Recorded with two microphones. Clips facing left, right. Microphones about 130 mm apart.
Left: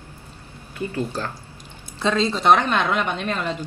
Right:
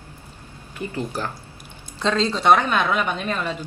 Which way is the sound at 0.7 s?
15° right (ahead or behind).